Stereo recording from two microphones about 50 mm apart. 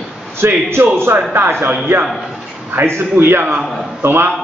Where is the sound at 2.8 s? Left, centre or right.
Right.